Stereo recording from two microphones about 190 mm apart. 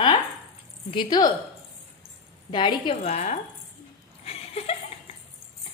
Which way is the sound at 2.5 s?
25° left (ahead or behind).